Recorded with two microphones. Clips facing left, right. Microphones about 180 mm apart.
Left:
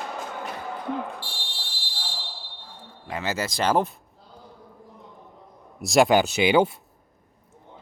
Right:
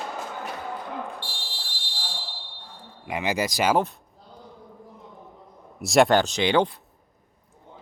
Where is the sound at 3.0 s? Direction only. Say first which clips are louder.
Right 3 dB; 15° right (ahead or behind).